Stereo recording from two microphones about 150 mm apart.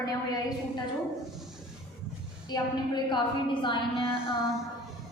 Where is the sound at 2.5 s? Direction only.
30° left (ahead or behind).